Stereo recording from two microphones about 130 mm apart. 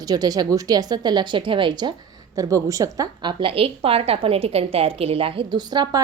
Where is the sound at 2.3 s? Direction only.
25° right (ahead or behind).